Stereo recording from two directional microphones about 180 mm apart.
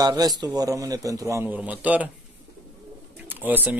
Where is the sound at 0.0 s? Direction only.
20° right (ahead or behind).